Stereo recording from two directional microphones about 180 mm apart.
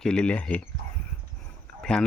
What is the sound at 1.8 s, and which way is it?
Cricket, 5° left (ahead or behind).